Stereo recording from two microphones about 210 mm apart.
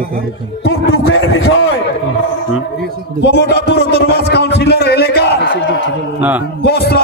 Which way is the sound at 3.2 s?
55° left (ahead or behind).